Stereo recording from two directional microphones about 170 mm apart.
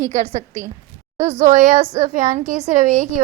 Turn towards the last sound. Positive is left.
turn(degrees=-45)  # may be behind; listen again after turning